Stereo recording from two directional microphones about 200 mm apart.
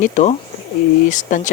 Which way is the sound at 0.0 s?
35° left (ahead or behind).